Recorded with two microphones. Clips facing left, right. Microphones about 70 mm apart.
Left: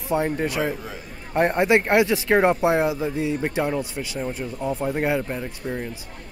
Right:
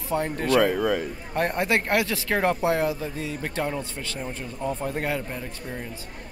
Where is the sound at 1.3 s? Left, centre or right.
Left.